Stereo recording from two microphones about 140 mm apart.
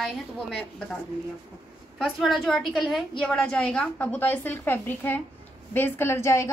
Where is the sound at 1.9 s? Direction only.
Centre (ahead or behind).